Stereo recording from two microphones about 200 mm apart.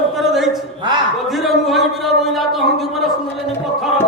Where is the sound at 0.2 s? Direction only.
Centre (ahead or behind).